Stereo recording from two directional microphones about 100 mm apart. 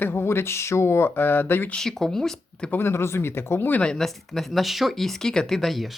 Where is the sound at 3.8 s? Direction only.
5° left (ahead or behind).